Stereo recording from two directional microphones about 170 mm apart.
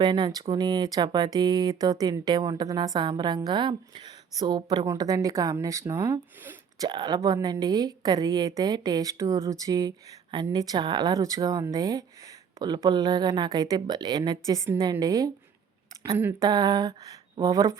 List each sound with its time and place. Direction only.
0.0 s speech: 25° right (ahead or behind)